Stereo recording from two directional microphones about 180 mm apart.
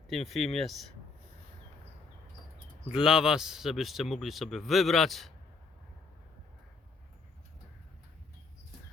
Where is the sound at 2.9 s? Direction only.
5° right (ahead or behind).